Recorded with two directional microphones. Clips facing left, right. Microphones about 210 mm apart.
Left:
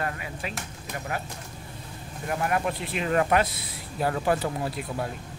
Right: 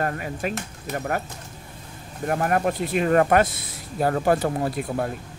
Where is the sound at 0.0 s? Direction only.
45° right (ahead or behind).